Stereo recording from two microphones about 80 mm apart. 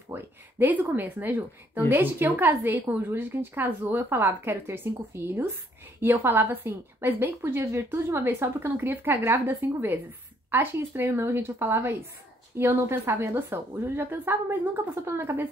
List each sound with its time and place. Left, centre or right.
0.1 s a woman's voice: right